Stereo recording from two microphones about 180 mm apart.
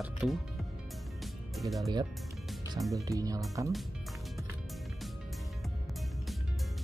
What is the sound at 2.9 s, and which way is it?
Speech, 20° right (ahead or behind).